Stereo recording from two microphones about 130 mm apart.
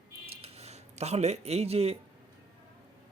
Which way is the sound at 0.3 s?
50° right (ahead or behind).